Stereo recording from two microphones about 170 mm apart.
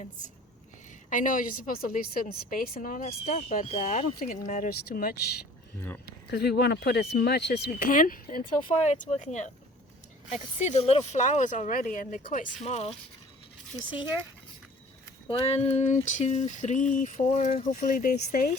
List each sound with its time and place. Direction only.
1.1 s a woman's voice: 50° left (ahead or behind)
6.3 s a woman's voice: 75° left (ahead or behind); by 12.5 s 50° left (ahead or behind)
12.6 s speech: 40° left (ahead or behind)
15.3 s a woman's voice: 35° left (ahead or behind)
17.6 s a woman's voice: 50° left (ahead or behind)